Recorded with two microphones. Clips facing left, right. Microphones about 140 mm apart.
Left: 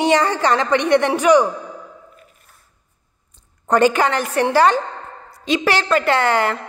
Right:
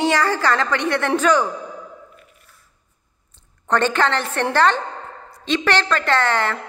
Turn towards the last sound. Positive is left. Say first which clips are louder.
# left 2 dB
turn(degrees=10)  # may be behind; listen again after turning